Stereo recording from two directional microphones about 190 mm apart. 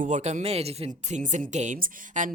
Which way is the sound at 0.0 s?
40° right (ahead or behind).